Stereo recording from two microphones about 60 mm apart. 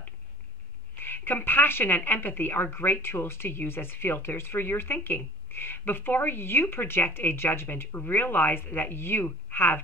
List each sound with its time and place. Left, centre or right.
0.9 s a woman's voice: left